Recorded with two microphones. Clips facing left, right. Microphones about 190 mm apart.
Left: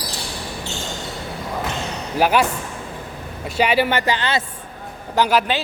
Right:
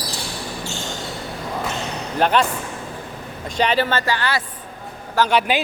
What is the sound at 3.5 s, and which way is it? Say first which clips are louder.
Speech: left 1 dB; 10° left (ahead or behind).